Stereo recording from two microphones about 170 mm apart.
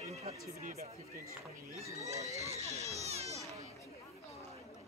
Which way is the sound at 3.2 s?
20° right (ahead or behind).